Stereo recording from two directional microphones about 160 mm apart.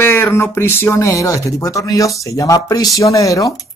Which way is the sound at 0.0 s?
15° left (ahead or behind).